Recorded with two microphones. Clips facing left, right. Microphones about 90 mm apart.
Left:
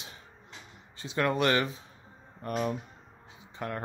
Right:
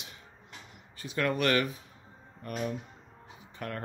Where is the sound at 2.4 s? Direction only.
35° left (ahead or behind).